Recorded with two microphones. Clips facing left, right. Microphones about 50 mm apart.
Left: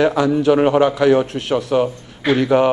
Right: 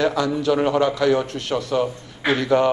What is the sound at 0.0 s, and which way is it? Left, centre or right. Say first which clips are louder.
A man's voice: left 5 dB; centre.